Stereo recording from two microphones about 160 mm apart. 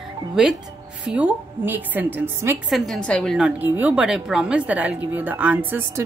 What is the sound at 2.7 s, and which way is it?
A woman's voice, 5° left (ahead or behind).